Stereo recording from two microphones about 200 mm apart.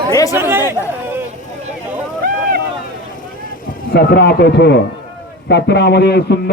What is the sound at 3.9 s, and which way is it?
A man's voice, 55° left (ahead or behind).